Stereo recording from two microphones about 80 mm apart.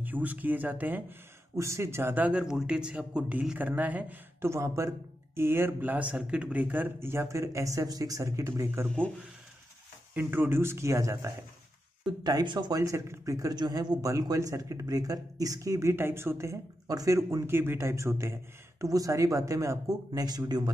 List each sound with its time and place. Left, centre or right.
0.0 s speech: right
1.6 s speech: right
2.4 s speech: centre
4.5 s speech: right
10.1 s speech: right
12.2 s speech: right
12.7 s speech: right
13.6 s speech: right
16.8 s speech: right